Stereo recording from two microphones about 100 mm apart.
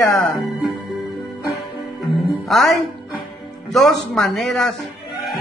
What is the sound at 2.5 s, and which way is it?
Speech, centre (ahead or behind).